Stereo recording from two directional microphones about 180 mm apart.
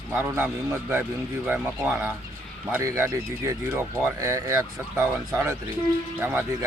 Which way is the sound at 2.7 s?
15° right (ahead or behind).